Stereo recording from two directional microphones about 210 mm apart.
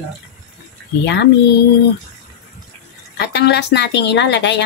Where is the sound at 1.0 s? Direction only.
55° left (ahead or behind).